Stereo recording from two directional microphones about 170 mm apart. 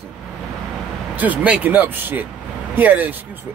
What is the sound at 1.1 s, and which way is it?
Speech, 10° right (ahead or behind).